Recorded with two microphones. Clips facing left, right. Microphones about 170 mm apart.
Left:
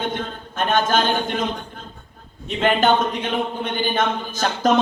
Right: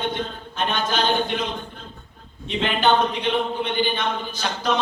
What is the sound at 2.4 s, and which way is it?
Speech, 45° left (ahead or behind).